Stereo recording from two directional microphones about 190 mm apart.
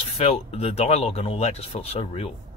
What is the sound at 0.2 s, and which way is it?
Speech, 30° left (ahead or behind).